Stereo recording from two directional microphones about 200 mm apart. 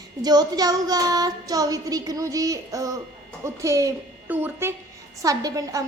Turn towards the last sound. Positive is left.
turn(degrees=-15)  # may be behind; listen again after turning